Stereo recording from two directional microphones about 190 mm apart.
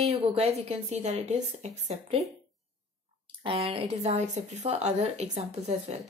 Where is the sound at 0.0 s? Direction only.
30° right (ahead or behind).